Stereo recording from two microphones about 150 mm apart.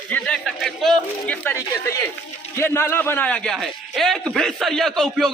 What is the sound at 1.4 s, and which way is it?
A man's voice, 15° left (ahead or behind).